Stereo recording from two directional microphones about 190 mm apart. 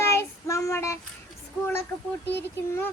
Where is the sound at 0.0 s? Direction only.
15° left (ahead or behind).